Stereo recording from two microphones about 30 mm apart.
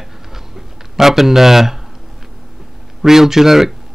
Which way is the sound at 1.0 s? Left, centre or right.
Centre.